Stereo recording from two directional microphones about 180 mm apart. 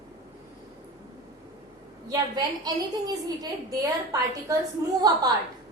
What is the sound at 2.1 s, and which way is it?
A woman's voice, 20° right (ahead or behind).